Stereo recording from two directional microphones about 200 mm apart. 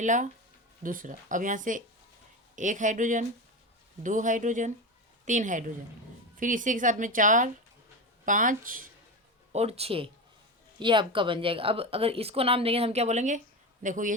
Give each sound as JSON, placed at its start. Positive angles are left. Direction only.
{"t": 0.0, "sound": "a woman's voice", "side_deg": -40}
{"t": 9.5, "sound": "a woman's voice", "side_deg": -30}